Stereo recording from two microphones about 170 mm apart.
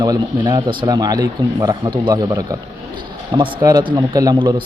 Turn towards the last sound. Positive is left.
turn(degrees=-25)  # may be behind; listen again after turning